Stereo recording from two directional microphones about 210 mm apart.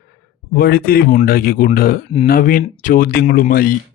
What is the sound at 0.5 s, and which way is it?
Speech, 45° left (ahead or behind).